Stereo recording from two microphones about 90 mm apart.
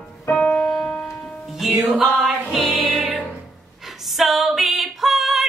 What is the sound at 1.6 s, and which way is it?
Music, 5° right (ahead or behind).